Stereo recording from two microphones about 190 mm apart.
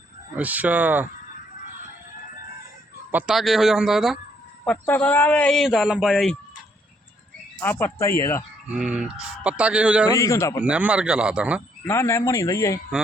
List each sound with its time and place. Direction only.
0.3 s speech: 10° right (ahead or behind)
3.1 s speech: 5° right (ahead or behind)
7.6 s speech: 10° left (ahead or behind)
8.7 s speech: 5° right (ahead or behind)
10.1 s speech: 15° left (ahead or behind)
10.6 s speech: 5° right (ahead or behind)
11.9 s speech: 15° left (ahead or behind)